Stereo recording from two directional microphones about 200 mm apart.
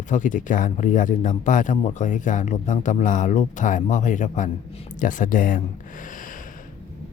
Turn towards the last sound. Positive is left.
turn(degrees=40)  # may be behind; listen again after turning